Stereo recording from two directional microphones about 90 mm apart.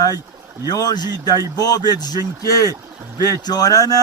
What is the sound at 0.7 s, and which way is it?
Speech, 50° left (ahead or behind).